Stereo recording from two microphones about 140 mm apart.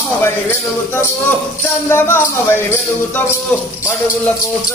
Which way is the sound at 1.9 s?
15° left (ahead or behind).